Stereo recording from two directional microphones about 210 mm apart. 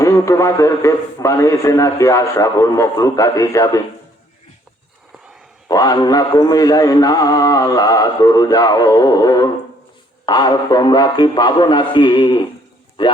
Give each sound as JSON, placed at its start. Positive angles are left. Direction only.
{"t": 0.0, "sound": "a man's voice", "side_deg": 15}
{"t": 5.6, "sound": "a man's voice", "side_deg": 15}